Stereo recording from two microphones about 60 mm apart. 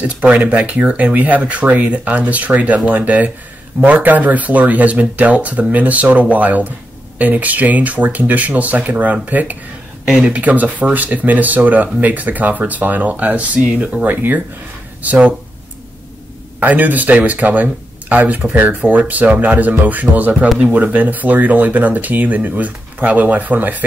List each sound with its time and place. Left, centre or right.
0.0 s speech: right
14.0 s speech: right
16.5 s speech: right